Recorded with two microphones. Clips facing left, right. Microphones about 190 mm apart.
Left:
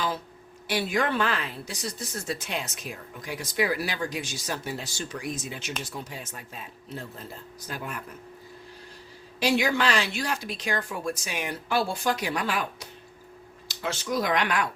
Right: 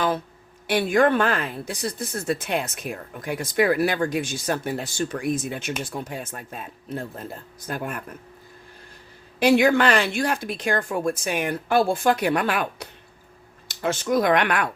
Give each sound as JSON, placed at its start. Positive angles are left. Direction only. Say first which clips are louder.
{"t": 0.7, "sound": "speech", "louder": "right 7 dB", "side_deg": -55}
{"t": 9.4, "sound": "speech", "louder": "right 7 dB", "side_deg": -55}